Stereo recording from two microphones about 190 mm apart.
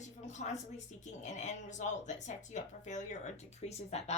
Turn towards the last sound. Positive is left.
turn(degrees=35)  # may be behind; listen again after turning